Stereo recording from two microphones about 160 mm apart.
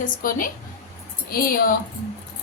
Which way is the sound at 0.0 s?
60° left (ahead or behind).